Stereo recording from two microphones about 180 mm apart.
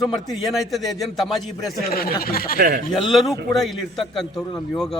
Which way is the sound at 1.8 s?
55° left (ahead or behind).